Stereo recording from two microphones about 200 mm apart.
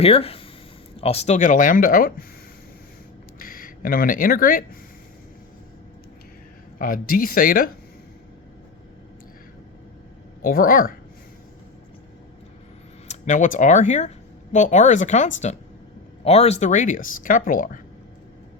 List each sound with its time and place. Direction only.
0.0 s speech: 30° left (ahead or behind); by 2.2 s 45° left (ahead or behind)
3.3 s speech: 45° left (ahead or behind)
6.7 s speech: 45° left (ahead or behind)
10.4 s speech: 45° left (ahead or behind)
13.1 s speech: 40° left (ahead or behind)